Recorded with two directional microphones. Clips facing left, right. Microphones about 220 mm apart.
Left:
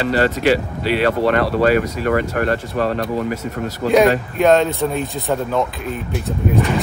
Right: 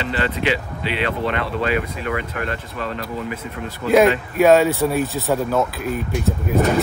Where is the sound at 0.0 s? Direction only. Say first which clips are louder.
Left 6 dB; 40° left (ahead or behind).